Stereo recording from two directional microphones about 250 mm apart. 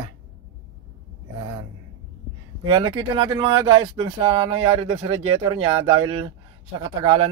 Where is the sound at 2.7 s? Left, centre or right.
Centre.